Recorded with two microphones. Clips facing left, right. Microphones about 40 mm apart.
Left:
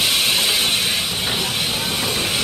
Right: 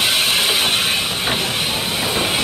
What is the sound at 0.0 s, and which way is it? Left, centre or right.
Train, right.